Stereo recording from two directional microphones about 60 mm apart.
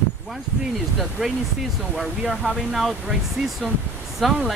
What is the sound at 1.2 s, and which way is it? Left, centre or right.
Speech, centre.